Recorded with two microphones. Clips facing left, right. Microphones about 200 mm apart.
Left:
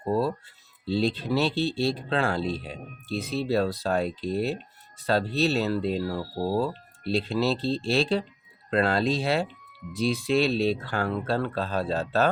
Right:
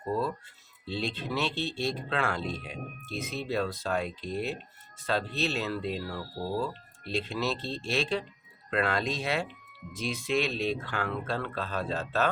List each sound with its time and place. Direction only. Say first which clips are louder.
0.1 s speech: left 5 dB; 35° left (ahead or behind)